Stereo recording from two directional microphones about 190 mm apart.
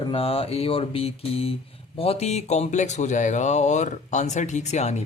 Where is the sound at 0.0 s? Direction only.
30° left (ahead or behind).